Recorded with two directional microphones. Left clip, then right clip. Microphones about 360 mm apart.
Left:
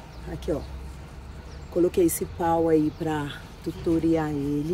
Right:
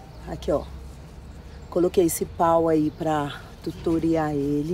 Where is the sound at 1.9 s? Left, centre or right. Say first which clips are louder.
Right 2 dB; centre.